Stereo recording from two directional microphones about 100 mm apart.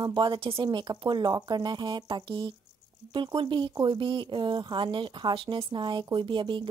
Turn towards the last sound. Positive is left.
turn(degrees=-55)  # may be behind; listen again after turning